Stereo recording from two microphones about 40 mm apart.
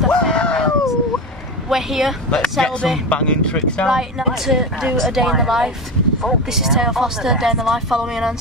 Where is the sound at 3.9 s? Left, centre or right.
Centre.